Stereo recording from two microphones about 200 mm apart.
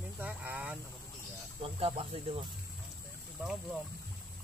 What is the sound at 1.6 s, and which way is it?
Speech, 30° right (ahead or behind).